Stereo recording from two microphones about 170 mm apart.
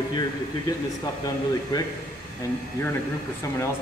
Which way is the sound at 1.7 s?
25° left (ahead or behind).